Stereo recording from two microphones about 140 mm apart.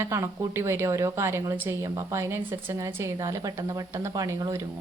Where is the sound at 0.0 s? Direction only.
20° right (ahead or behind).